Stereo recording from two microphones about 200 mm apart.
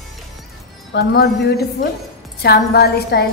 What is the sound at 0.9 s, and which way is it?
A woman's voice, 50° left (ahead or behind).